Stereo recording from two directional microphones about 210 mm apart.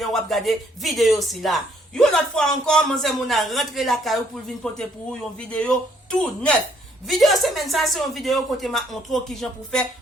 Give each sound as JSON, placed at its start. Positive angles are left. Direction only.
{"t": 0.0, "sound": "speech", "side_deg": 0}